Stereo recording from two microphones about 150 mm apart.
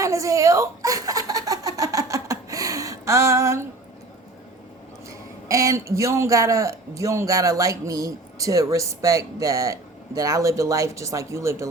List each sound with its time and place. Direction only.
0.0 s speech: 20° right (ahead or behind)
5.5 s a man's voice: 20° right (ahead or behind)